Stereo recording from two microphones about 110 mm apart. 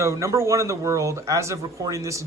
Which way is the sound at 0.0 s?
25° right (ahead or behind).